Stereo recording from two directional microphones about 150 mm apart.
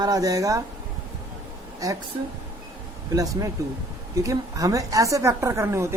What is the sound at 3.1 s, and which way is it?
A woman's voice, 20° right (ahead or behind).